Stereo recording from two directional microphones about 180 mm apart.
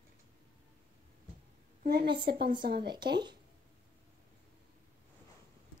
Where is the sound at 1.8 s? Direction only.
55° right (ahead or behind).